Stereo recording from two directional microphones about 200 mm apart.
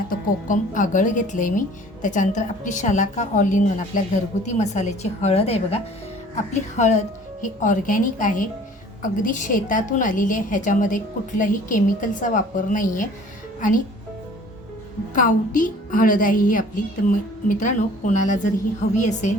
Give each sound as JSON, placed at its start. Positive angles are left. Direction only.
{"t": 0.1, "sound": "a woman's voice", "side_deg": 40}
{"t": 15.1, "sound": "a woman's voice", "side_deg": 40}